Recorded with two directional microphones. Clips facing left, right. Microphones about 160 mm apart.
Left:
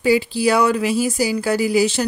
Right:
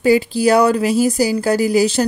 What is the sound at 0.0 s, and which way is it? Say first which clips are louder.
Speech: right 3 dB; 45° right (ahead or behind).